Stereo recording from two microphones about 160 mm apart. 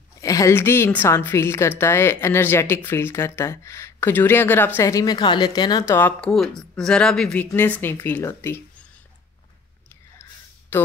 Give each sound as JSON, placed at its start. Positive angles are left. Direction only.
{"t": 0.2, "sound": "a woman's voice", "side_deg": 20}
{"t": 6.3, "sound": "a woman's voice", "side_deg": 0}
{"t": 10.7, "sound": "a woman's voice", "side_deg": 15}